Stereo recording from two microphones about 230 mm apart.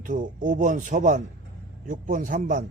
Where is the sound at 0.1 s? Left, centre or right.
Right.